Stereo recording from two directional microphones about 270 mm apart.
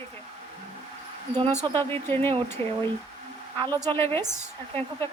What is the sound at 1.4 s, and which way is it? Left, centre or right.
Speech, right.